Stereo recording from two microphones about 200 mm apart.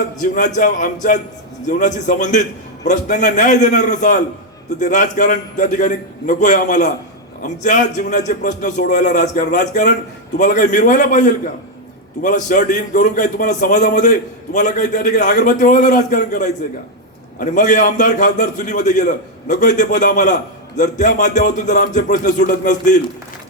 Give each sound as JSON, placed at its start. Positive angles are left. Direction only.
{"t": 0.2, "sound": "a man's voice", "side_deg": 40}